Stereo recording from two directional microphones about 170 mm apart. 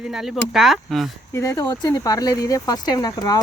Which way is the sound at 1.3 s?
20° left (ahead or behind).